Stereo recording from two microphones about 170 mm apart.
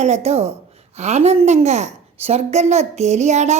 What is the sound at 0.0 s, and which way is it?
A woman's voice, 40° right (ahead or behind).